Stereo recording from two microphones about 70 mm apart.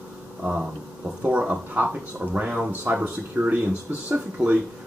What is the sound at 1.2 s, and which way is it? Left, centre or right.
Speech, centre.